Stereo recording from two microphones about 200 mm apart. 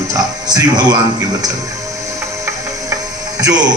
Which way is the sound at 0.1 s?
20° right (ahead or behind).